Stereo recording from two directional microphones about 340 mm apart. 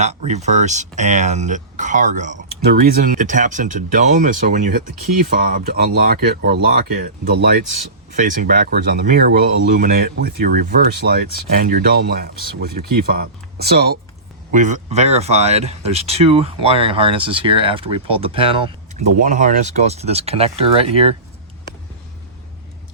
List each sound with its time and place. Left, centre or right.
0.0 s speech: centre
8.1 s speech: right